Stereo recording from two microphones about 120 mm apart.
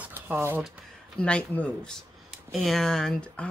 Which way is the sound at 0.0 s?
15° right (ahead or behind).